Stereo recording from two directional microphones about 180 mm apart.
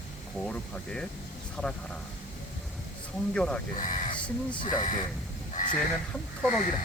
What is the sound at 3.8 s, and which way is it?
Speech, 45° left (ahead or behind).